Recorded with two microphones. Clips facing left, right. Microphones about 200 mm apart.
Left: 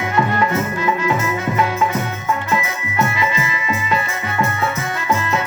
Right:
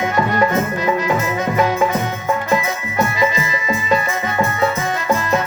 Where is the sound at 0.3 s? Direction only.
40° right (ahead or behind).